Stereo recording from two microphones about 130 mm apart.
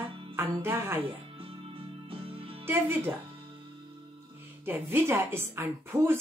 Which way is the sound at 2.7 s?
15° right (ahead or behind).